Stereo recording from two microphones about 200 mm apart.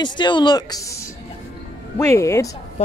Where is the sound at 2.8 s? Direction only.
35° left (ahead or behind).